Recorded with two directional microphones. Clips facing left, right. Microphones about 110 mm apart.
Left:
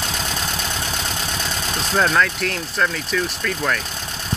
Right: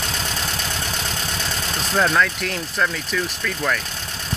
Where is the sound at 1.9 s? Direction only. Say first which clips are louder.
Left 1 dB; 5° left (ahead or behind).